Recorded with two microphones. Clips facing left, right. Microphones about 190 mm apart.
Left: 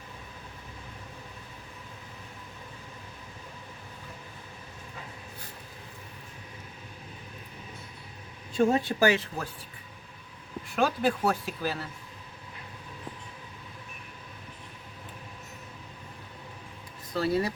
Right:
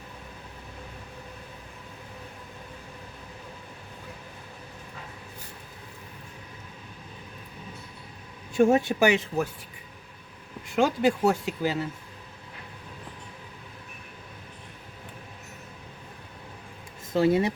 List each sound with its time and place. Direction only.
8.6 s speech: 20° right (ahead or behind)
10.8 s speech: 20° right (ahead or behind)
17.1 s speech: 20° right (ahead or behind)